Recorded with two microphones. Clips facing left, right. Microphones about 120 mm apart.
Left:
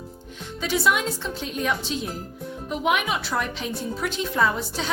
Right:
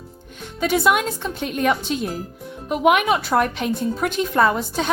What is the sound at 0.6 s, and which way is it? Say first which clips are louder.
A woman's voice: right 5 dB; 55° right (ahead or behind).